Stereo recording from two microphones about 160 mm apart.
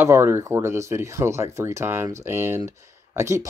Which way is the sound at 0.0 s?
15° right (ahead or behind).